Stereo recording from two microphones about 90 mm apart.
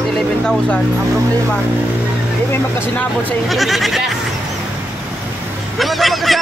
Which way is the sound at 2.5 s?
25° left (ahead or behind).